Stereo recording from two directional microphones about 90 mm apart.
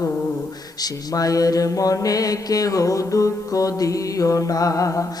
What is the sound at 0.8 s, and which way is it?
Mantra, 40° left (ahead or behind).